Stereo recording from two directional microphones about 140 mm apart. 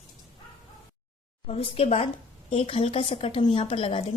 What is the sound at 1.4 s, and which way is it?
A woman's voice, 45° left (ahead or behind).